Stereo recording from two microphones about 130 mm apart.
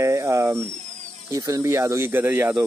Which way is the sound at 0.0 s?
25° right (ahead or behind).